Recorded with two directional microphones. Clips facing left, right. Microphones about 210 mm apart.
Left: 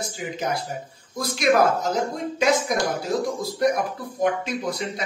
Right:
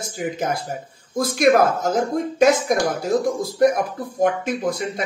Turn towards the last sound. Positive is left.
turn(degrees=-50)  # may be behind; listen again after turning